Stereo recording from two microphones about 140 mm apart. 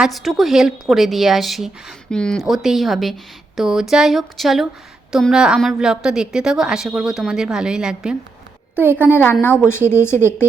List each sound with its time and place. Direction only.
0.0 s a woman's voice: centre (ahead or behind)
9.1 s a woman's voice: 15° left (ahead or behind)